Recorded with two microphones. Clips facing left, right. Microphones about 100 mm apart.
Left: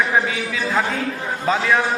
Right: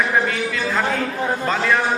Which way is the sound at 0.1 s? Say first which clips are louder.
Even; centre (ahead or behind).